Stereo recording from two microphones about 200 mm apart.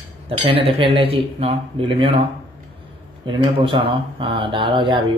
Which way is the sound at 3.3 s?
25° right (ahead or behind).